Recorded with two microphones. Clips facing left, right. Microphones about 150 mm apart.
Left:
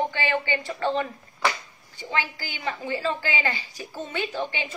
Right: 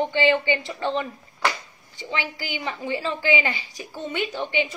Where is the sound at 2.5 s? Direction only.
15° right (ahead or behind).